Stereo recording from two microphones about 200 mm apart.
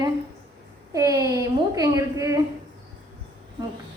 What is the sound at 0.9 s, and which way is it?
A woman's voice, 15° right (ahead or behind).